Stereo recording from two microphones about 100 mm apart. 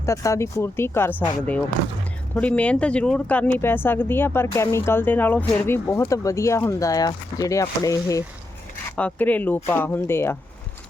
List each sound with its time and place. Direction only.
0.0 s speech: 30° left (ahead or behind)
9.0 s speech: 15° left (ahead or behind)